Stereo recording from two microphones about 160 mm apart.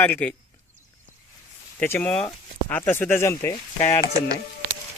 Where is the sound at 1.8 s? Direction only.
10° left (ahead or behind).